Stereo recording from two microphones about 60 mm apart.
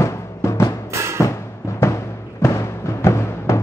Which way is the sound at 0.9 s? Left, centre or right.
Right.